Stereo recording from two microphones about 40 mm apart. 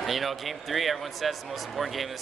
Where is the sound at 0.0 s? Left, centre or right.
Centre.